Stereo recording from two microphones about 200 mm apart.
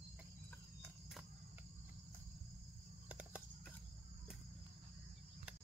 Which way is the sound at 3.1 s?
5° right (ahead or behind).